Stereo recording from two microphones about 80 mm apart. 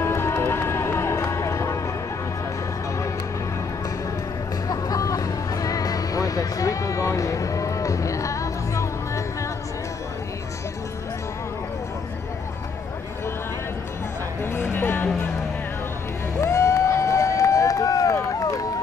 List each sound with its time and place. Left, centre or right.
0.0 s music: left
4.6 s music: left
14.6 s music: centre
16.3 s run: left